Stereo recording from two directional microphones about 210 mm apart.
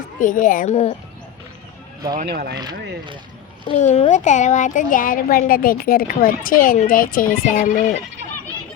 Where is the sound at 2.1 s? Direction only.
45° right (ahead or behind).